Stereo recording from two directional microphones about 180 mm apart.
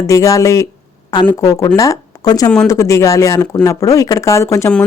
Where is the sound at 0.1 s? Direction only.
20° left (ahead or behind).